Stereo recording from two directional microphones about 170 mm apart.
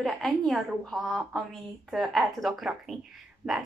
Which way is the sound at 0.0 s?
Centre (ahead or behind).